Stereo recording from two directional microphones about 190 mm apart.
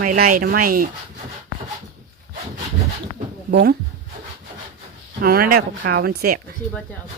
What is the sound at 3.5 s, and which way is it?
Speech, 55° right (ahead or behind).